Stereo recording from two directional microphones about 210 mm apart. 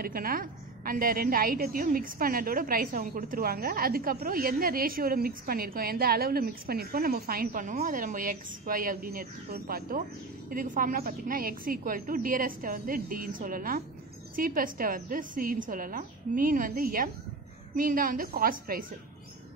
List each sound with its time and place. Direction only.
0.0 s a woman's voice: 45° right (ahead or behind)